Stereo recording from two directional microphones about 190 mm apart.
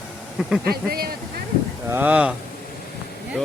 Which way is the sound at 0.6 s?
55° right (ahead or behind).